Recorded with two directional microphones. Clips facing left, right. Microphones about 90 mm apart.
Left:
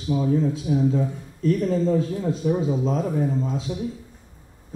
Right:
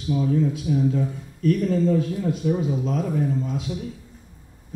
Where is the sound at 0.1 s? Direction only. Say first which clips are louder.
Even; 25° left (ahead or behind).